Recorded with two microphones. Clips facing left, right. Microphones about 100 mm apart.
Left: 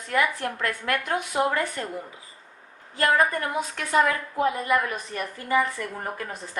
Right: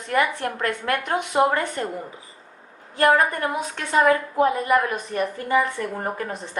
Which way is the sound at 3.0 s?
30° right (ahead or behind).